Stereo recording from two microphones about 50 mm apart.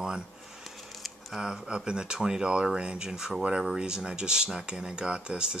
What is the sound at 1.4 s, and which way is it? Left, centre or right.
Speech, centre.